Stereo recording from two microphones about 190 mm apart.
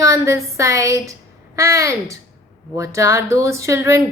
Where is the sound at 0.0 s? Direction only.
15° right (ahead or behind).